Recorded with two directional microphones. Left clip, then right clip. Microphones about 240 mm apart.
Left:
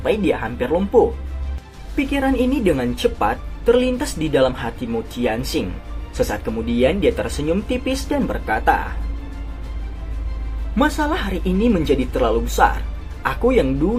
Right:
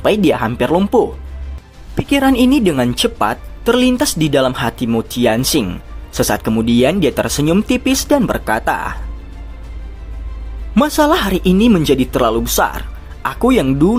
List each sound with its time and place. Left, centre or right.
0.0 s a woman's voice: right
2.0 s a woman's voice: right
10.8 s a woman's voice: right